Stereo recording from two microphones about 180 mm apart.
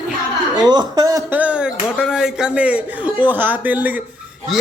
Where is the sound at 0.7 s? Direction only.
20° right (ahead or behind).